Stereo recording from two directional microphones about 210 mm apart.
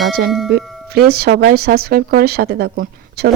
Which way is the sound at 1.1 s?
50° right (ahead or behind).